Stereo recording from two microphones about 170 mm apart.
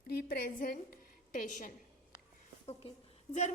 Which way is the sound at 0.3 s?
55° left (ahead or behind).